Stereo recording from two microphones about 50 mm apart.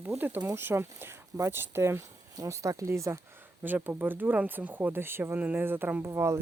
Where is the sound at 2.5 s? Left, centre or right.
Right.